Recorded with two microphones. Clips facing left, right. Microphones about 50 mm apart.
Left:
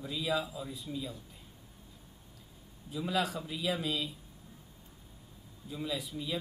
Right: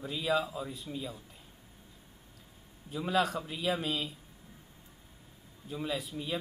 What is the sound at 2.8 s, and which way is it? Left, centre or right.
Speech, right.